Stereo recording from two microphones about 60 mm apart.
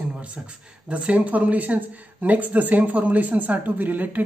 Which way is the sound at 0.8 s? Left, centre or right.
Right.